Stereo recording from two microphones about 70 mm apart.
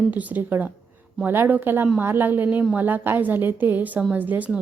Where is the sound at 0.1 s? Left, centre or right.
Right.